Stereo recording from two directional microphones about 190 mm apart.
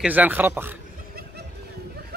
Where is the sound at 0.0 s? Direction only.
10° right (ahead or behind).